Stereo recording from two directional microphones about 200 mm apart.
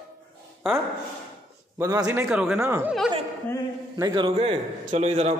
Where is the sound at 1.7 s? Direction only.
15° right (ahead or behind).